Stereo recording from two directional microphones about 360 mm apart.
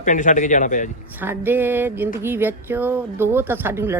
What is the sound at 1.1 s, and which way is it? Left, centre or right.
Speech, centre.